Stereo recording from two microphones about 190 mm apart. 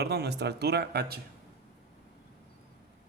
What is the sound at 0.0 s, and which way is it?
Speech, 60° right (ahead or behind).